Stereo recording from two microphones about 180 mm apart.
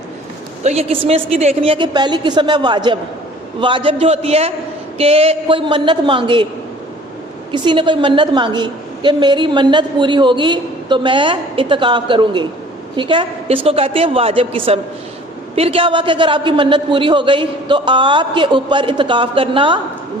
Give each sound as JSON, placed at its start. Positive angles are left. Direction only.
{"t": 0.6, "sound": "a woman's voice", "side_deg": -35}
{"t": 7.5, "sound": "a woman's voice", "side_deg": -25}